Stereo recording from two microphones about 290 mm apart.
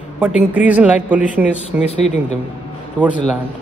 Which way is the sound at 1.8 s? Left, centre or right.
Left.